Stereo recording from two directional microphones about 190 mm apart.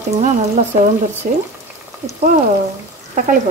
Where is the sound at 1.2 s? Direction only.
45° right (ahead or behind).